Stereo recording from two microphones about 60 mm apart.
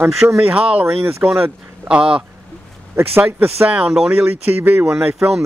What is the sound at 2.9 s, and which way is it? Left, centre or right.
Speech, right.